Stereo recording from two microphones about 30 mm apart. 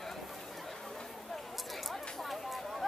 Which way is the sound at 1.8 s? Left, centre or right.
Centre.